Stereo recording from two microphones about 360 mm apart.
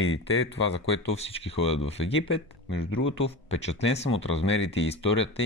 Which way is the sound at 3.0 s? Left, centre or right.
Left.